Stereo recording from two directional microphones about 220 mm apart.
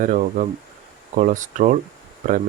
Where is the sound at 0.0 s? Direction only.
35° right (ahead or behind).